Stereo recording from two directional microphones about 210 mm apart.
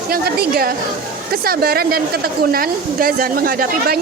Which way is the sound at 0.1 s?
45° right (ahead or behind).